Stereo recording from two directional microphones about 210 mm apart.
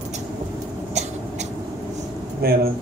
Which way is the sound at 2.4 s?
45° right (ahead or behind).